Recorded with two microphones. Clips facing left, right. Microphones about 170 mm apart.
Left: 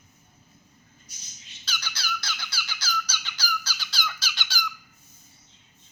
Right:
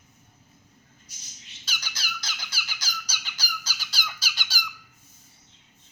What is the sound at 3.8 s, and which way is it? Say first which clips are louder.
Squeak: left 3 dB; 40° right (ahead or behind).